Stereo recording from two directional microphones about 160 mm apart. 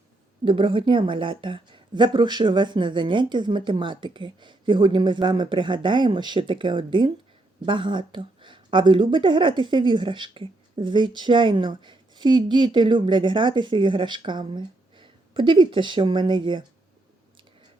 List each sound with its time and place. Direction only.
0.4 s a woman's voice: 30° right (ahead or behind)